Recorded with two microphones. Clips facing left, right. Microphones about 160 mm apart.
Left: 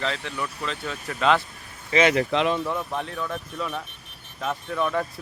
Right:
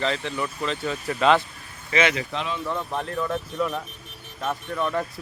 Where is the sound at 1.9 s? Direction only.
35° left (ahead or behind).